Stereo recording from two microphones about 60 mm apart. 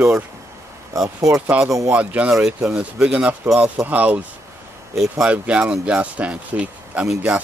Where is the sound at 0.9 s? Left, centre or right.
Right.